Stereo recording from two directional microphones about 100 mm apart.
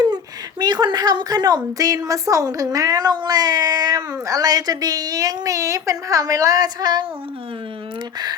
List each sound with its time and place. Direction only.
0.6 s a woman's voice: 45° right (ahead or behind)